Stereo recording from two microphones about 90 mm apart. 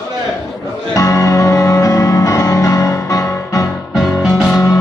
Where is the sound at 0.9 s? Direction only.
40° left (ahead or behind).